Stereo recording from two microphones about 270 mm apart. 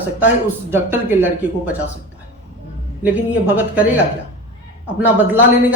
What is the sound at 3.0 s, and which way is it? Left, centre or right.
Speech, centre.